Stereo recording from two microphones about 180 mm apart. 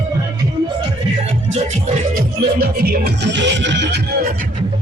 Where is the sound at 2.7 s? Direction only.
60° right (ahead or behind).